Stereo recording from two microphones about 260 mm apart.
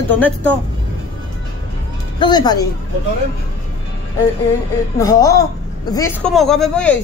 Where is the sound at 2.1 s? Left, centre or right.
Centre.